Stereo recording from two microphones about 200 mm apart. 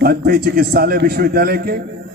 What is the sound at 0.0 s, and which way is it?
A man's voice, 50° right (ahead or behind).